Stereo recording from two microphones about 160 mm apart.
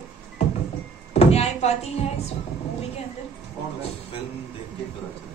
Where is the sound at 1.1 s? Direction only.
40° left (ahead or behind).